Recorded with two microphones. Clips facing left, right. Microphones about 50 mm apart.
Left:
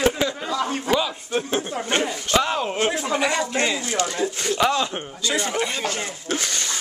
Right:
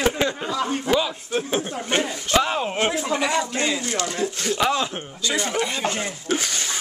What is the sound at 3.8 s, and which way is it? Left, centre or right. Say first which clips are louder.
Speech: left 1 dB; centre.